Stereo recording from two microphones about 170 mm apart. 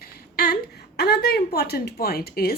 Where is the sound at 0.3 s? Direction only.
65° left (ahead or behind).